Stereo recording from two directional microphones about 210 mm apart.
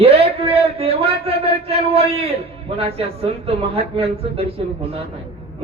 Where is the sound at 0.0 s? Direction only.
30° right (ahead or behind).